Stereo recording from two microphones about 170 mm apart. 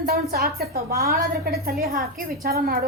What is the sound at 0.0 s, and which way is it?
A woman's voice, 65° right (ahead or behind).